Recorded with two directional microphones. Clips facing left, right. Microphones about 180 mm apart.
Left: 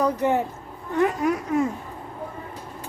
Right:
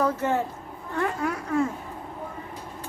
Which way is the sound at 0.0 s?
15° left (ahead or behind).